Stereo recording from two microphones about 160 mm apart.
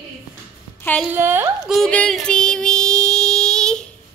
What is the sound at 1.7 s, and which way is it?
Child singing, 5° left (ahead or behind).